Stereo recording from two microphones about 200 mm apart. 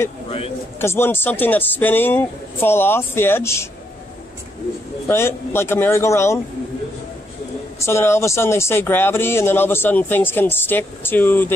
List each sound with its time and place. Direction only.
0.7 s speech: 10° left (ahead or behind)
5.0 s speech: 10° left (ahead or behind)
7.8 s speech: 15° left (ahead or behind)